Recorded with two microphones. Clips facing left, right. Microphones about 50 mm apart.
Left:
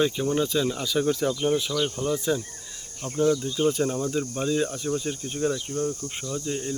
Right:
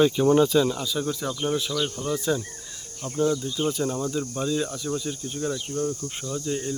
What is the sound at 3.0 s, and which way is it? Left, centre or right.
Speech, left.